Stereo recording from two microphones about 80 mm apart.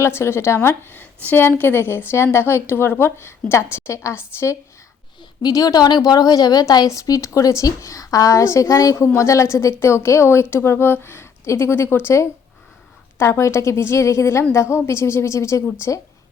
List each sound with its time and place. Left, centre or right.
0.0 s a woman's voice: left
5.4 s a woman's voice: left